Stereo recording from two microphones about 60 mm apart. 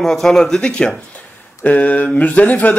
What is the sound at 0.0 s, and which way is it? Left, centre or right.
Speech, centre.